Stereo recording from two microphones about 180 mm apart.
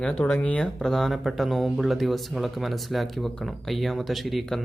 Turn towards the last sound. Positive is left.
turn(degrees=0)  # may be behind; listen again after turning